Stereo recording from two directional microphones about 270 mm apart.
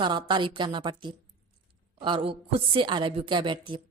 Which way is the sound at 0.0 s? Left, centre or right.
Centre.